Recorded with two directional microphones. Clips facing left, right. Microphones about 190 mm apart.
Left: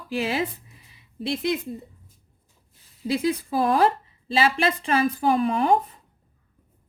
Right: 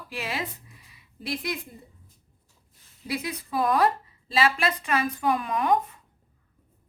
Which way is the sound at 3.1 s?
30° left (ahead or behind).